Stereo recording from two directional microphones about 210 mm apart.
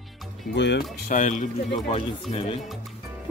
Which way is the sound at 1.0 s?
40° left (ahead or behind).